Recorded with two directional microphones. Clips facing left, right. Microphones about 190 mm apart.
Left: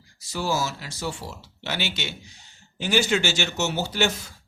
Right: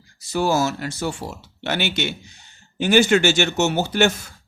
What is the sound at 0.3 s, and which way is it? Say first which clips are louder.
A man's voice: right 7 dB; 55° right (ahead or behind).